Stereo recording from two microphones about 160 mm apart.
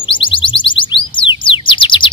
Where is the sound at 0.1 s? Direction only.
30° left (ahead or behind).